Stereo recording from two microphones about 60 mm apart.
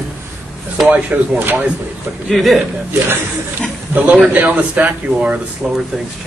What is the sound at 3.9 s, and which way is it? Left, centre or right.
Speech, right.